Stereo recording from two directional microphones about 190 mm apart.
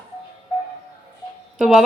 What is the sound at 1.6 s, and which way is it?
Speech, centre (ahead or behind).